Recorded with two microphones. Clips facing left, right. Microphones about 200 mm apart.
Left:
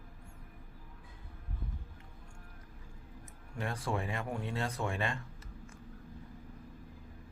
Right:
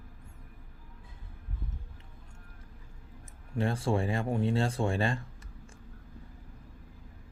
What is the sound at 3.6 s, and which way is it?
Speech, 30° right (ahead or behind).